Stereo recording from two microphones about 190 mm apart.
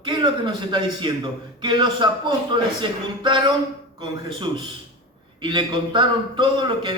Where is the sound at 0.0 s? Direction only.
25° right (ahead or behind).